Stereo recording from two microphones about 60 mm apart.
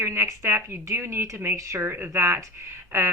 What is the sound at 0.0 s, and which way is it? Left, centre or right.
Speech, right.